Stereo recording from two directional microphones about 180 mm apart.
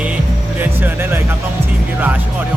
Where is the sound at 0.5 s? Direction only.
10° right (ahead or behind).